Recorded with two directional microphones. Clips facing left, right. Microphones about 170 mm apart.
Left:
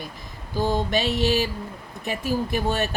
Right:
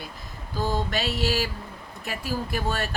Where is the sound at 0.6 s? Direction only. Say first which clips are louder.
Left 4 dB; 15° left (ahead or behind).